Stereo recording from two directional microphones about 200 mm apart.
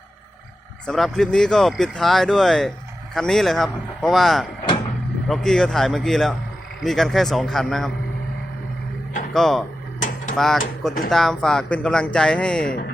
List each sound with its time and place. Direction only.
0.9 s speech: centre (ahead or behind)
9.3 s speech: centre (ahead or behind)
10.0 s a sound: 40° left (ahead or behind)
10.3 s speech: centre (ahead or behind)